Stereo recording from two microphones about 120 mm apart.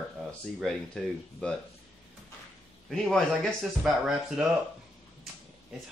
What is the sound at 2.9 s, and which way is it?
Speech, 5° left (ahead or behind).